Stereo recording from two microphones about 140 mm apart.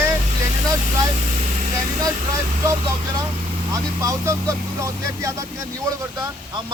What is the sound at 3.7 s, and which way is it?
Speech, 25° right (ahead or behind).